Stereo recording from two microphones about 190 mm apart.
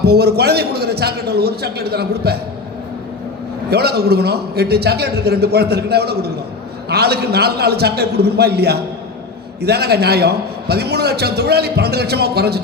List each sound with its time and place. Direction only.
0.0 s a man's voice: 55° right (ahead or behind)
3.7 s a man's voice: 55° right (ahead or behind)